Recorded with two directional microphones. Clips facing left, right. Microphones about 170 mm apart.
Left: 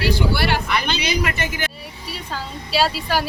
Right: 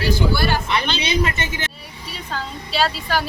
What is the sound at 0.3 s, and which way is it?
Speech, 70° left (ahead or behind).